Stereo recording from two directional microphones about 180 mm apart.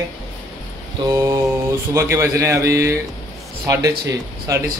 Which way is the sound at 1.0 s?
20° right (ahead or behind).